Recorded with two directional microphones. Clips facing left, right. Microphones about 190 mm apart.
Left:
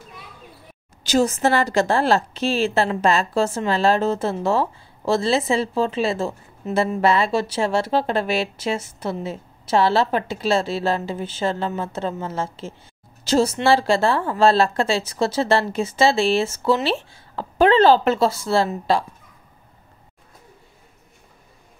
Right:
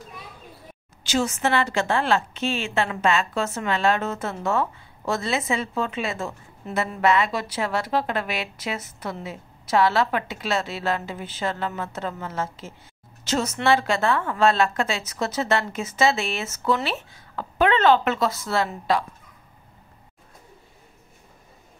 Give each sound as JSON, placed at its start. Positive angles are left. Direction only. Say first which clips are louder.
{"t": 1.0, "sound": "a woman's voice", "louder": "left 5 dB", "side_deg": 35}